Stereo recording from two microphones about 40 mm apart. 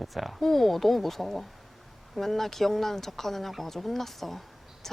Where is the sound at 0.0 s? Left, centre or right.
Centre.